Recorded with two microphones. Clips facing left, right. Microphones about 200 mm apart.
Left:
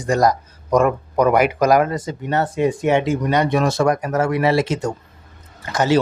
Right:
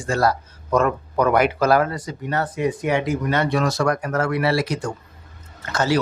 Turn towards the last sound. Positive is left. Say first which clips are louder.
# left 4 dB
turn(degrees=20)  # may be behind; listen again after turning